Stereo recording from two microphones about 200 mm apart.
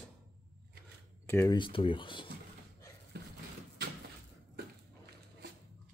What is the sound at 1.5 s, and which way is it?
Speech, 25° left (ahead or behind).